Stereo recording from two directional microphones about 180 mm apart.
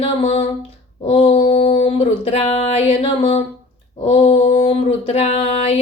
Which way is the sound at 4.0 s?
30° left (ahead or behind).